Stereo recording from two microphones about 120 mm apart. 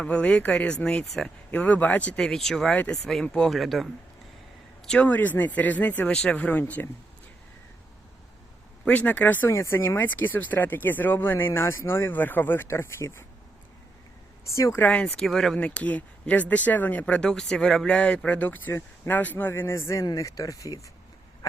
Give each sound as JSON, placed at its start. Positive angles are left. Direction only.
{"t": 0.0, "sound": "speech", "side_deg": 10}
{"t": 4.9, "sound": "speech", "side_deg": 10}
{"t": 8.8, "sound": "speech", "side_deg": 15}
{"t": 14.5, "sound": "speech", "side_deg": 25}
{"t": 14.8, "sound": "speech", "side_deg": 10}